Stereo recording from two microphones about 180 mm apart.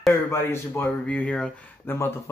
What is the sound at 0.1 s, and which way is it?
Speech, 15° left (ahead or behind).